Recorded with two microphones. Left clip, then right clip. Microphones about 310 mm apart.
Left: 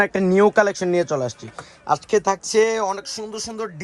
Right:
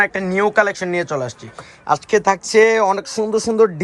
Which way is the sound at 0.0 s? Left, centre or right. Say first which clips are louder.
Even; left.